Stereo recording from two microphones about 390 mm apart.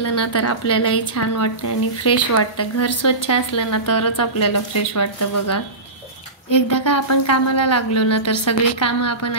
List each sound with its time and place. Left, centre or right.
0.0 s speech: left